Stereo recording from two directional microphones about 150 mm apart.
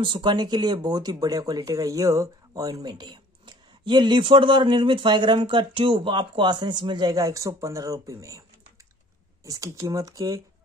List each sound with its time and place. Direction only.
0.0 s speech: 30° right (ahead or behind)